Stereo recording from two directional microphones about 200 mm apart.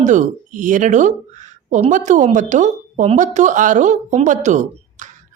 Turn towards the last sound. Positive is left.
turn(degrees=-40)  # may be behind; listen again after turning